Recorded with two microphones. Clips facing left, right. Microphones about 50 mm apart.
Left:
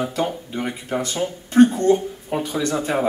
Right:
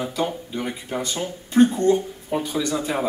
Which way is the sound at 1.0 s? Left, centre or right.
Left.